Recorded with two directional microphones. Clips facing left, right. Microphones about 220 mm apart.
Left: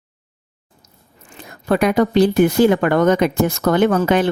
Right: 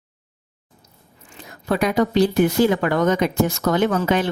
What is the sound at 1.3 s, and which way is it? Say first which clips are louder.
Speech: left 4 dB; 55° left (ahead or behind).